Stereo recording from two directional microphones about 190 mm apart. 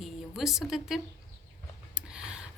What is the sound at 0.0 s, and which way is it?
A woman's voice, centre (ahead or behind).